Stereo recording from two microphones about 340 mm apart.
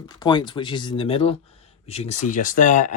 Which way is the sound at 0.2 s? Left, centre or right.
Centre.